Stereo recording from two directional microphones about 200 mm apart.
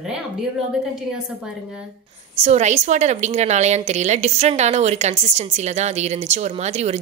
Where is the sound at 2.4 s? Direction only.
35° right (ahead or behind).